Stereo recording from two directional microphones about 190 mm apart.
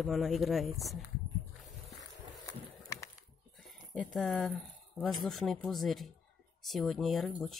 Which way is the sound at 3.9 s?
Centre (ahead or behind).